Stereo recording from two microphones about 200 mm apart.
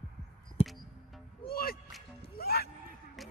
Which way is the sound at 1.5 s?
50° left (ahead or behind).